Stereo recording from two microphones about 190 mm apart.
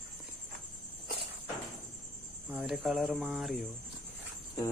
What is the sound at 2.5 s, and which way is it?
Speech, 5° right (ahead or behind).